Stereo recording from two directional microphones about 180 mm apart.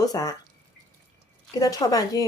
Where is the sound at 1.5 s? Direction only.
20° left (ahead or behind).